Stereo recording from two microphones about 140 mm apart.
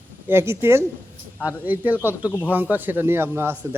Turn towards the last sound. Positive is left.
turn(degrees=-15)  # may be behind; listen again after turning